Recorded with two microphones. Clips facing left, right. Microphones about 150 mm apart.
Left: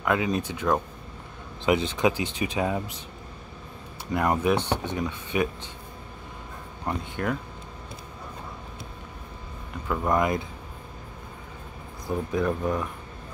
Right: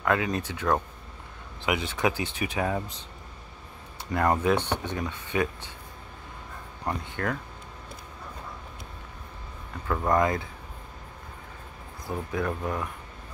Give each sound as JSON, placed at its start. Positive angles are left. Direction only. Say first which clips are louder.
{"t": 0.0, "sound": "speech", "louder": "left 1 dB", "side_deg": 20}
{"t": 4.1, "sound": "speech", "louder": "even", "side_deg": 15}
{"t": 7.2, "sound": "speech", "louder": "left 2 dB", "side_deg": 15}
{"t": 9.8, "sound": "speech", "louder": "even", "side_deg": 15}
{"t": 12.1, "sound": "speech", "louder": "left 4 dB", "side_deg": 20}